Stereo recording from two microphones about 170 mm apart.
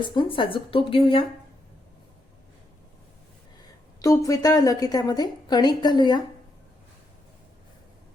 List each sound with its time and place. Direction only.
0.0 s speech: 30° left (ahead or behind)
4.0 s speech: 20° left (ahead or behind)